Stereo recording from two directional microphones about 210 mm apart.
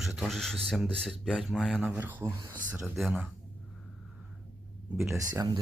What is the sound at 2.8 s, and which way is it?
Speech, centre (ahead or behind).